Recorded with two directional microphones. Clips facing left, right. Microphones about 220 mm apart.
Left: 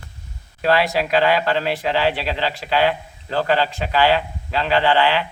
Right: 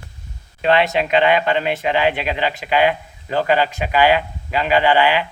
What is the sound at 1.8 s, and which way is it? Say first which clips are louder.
A man's voice: right 2 dB; 15° right (ahead or behind).